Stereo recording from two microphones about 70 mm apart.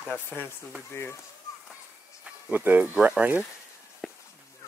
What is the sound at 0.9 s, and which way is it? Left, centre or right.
Speech, left.